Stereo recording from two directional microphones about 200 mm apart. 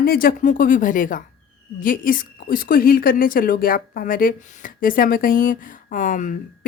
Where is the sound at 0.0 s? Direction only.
45° left (ahead or behind).